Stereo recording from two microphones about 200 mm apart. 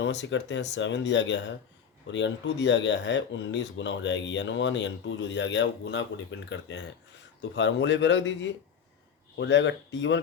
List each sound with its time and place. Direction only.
0.0 s speech: 65° left (ahead or behind)